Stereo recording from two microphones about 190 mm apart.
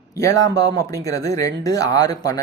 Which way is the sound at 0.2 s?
15° left (ahead or behind).